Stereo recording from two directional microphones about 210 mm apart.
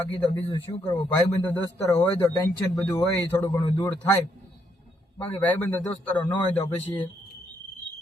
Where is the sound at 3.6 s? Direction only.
20° left (ahead or behind).